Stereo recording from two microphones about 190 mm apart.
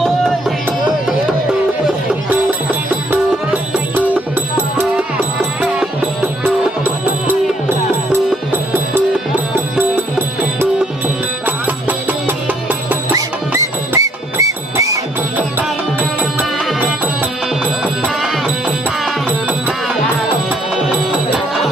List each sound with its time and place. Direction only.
2.3 s music: 10° right (ahead or behind)
8.3 s music: 10° right (ahead or behind)
18.0 s music: 5° right (ahead or behind)